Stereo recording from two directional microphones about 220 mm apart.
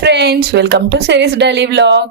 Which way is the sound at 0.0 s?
50° right (ahead or behind).